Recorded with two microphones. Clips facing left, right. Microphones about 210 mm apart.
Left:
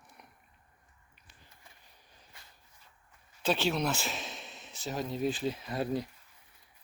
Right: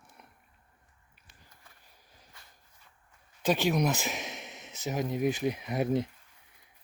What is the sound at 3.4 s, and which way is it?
Speech, 15° right (ahead or behind).